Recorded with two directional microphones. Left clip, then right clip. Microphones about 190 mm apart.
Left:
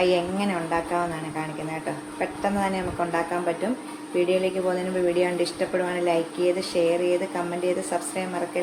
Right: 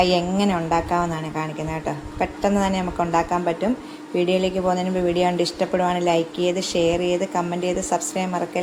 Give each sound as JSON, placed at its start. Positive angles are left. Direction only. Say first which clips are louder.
{"t": 0.0, "sound": "a woman's voice", "louder": "right 3 dB", "side_deg": -40}